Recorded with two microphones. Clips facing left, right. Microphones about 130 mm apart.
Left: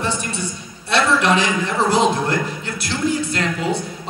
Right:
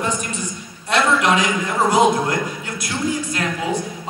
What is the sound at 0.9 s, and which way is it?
A man's voice, 30° left (ahead or behind).